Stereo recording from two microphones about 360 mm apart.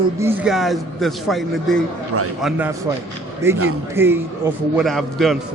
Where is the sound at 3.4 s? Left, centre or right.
Centre.